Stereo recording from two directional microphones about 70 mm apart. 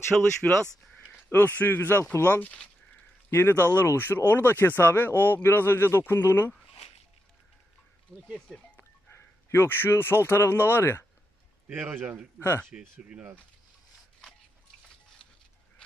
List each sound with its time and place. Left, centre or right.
0.1 s speech: centre
1.3 s speech: left
3.3 s speech: left
8.5 s music: centre
9.1 s speech: left
11.7 s a man's voice: right
12.4 s speech: left